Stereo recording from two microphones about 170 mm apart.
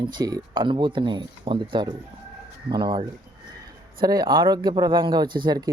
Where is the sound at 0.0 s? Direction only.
25° right (ahead or behind).